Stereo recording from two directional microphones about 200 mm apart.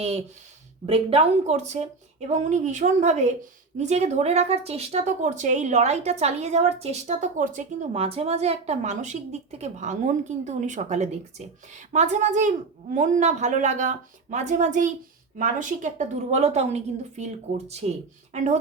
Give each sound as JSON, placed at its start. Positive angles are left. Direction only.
{"t": 0.0, "sound": "speech", "side_deg": -30}